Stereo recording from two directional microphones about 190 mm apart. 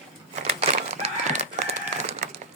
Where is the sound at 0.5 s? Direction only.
35° right (ahead or behind).